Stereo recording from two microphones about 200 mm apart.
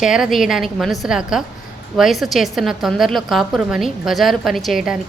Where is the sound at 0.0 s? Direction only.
Centre (ahead or behind).